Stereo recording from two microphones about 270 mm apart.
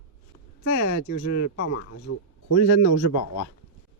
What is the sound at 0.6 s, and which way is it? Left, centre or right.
A woman's voice, left.